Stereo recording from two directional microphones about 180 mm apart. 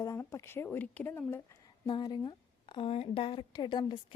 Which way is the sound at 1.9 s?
25° left (ahead or behind).